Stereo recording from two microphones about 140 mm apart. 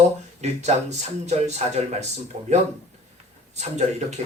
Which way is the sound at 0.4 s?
50° right (ahead or behind).